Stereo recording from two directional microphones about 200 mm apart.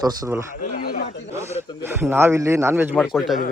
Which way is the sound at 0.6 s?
45° left (ahead or behind).